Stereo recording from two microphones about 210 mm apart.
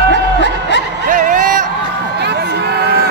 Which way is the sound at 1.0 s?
40° right (ahead or behind).